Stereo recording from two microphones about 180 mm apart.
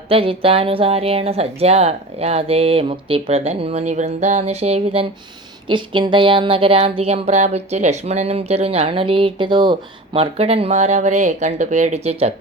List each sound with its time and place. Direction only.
0.1 s speech: 30° right (ahead or behind)